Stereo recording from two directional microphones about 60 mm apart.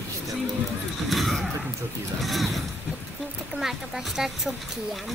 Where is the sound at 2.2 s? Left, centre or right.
Centre.